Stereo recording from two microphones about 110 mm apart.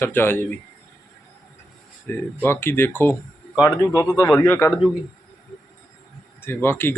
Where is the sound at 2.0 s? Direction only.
20° left (ahead or behind).